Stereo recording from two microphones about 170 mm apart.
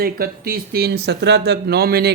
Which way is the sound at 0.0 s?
60° right (ahead or behind).